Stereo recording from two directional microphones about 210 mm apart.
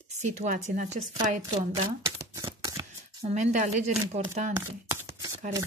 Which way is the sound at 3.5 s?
35° right (ahead or behind).